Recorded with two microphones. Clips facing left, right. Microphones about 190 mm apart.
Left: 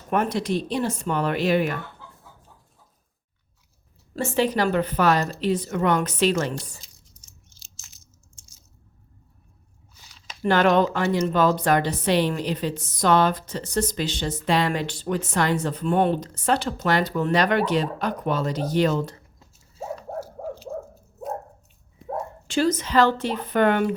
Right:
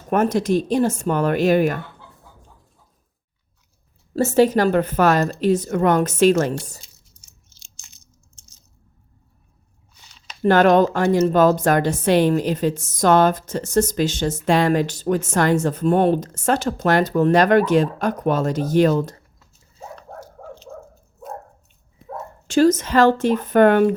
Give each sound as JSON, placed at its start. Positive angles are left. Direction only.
{"t": 0.1, "sound": "a woman's voice", "side_deg": -45}
{"t": 4.1, "sound": "a woman's voice", "side_deg": -40}
{"t": 7.6, "sound": "biting", "side_deg": 0}
{"t": 10.4, "sound": "a woman's voice", "side_deg": -45}
{"t": 20.0, "sound": "dog", "side_deg": 5}
{"t": 22.4, "sound": "a woman's voice", "side_deg": -45}